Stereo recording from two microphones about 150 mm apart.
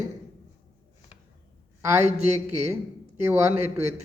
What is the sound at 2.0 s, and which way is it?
Speech, 50° right (ahead or behind).